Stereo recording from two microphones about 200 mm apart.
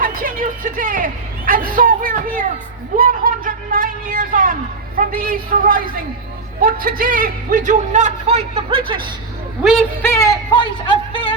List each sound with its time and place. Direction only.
0.0 s a sound: 45° right (ahead or behind)
4.9 s a man's voice: 45° right (ahead or behind)
10.0 s music: 10° left (ahead or behind)